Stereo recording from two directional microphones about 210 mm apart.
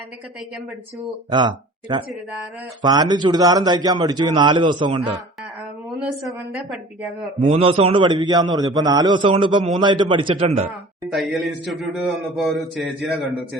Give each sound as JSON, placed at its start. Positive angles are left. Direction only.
{"t": 1.3, "sound": "a man's voice", "side_deg": -20}
{"t": 6.2, "sound": "a man's voice", "side_deg": 0}
{"t": 7.4, "sound": "a man's voice", "side_deg": -25}
{"t": 10.7, "sound": "a man's voice", "side_deg": 0}